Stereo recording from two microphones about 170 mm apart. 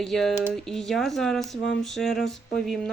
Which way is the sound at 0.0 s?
Centre (ahead or behind).